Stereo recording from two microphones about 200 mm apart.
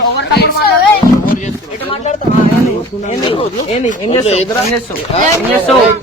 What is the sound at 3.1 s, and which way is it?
Speech, 30° left (ahead or behind).